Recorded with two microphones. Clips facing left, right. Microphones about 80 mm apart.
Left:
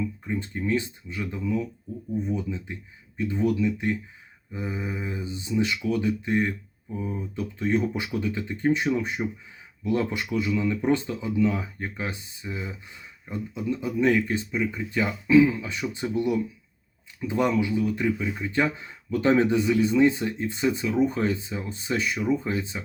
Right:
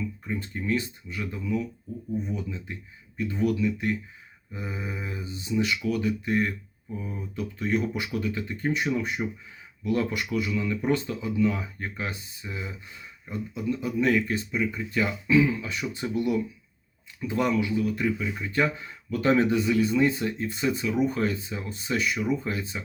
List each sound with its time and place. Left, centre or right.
0.3 s speech: left